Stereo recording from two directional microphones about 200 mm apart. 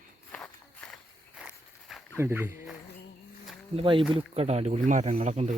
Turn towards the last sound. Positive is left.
turn(degrees=-35)  # may be behind; listen again after turning